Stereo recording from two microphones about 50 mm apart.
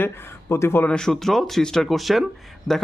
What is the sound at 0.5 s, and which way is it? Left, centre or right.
Speech, left.